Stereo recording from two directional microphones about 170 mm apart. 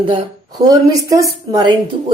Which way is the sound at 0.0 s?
30° right (ahead or behind).